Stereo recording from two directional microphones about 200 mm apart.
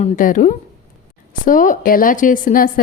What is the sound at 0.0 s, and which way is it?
A woman's voice, 40° left (ahead or behind).